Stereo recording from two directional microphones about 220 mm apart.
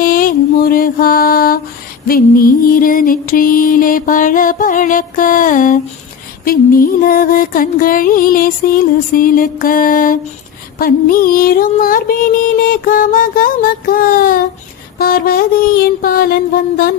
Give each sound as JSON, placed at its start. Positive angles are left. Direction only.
{"t": 0.0, "sound": "mantra", "side_deg": 40}
{"t": 2.0, "sound": "music", "side_deg": 40}